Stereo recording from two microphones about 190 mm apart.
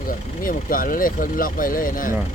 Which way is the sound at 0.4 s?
45° left (ahead or behind).